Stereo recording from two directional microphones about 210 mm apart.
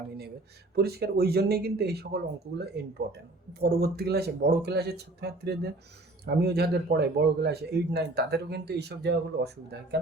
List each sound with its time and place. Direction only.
0.8 s a man's voice: 50° right (ahead or behind)